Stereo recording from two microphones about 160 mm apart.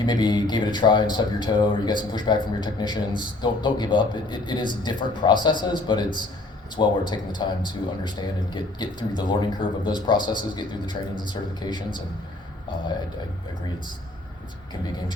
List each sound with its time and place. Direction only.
0.0 s a man's voice: 25° left (ahead or behind)